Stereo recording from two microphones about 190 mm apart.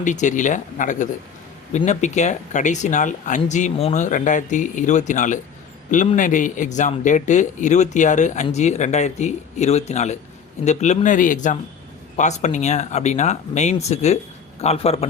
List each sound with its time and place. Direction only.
0.0 s speech: 40° left (ahead or behind)